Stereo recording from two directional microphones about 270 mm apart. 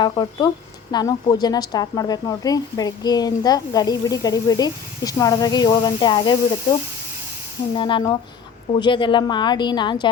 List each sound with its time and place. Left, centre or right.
0.0 s speech: centre
7.7 s speech: centre